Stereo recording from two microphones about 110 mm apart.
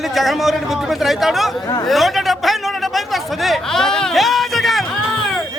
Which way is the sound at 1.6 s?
35° left (ahead or behind).